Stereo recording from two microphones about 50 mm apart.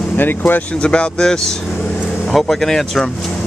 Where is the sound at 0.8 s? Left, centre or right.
Centre.